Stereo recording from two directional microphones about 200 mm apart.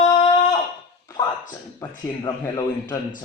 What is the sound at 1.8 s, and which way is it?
Speech, 20° left (ahead or behind).